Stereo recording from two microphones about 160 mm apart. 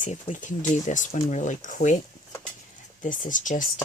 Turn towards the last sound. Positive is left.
turn(degrees=55)  # may be behind; listen again after turning